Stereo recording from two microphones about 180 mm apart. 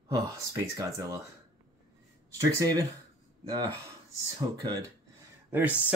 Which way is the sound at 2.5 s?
20° right (ahead or behind).